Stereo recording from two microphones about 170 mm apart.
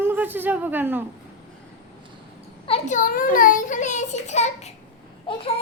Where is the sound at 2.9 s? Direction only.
55° left (ahead or behind).